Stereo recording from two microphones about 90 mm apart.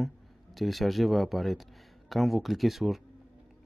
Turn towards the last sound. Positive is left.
turn(degrees=-5)  # may be behind; listen again after turning